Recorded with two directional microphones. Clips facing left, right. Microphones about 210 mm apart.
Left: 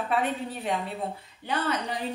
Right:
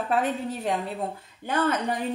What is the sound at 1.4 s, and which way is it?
Speech, 50° right (ahead or behind).